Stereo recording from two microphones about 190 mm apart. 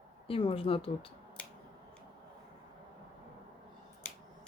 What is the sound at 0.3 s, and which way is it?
Speech, 30° left (ahead or behind).